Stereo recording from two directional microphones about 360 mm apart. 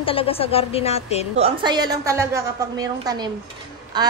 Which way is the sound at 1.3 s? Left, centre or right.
Centre.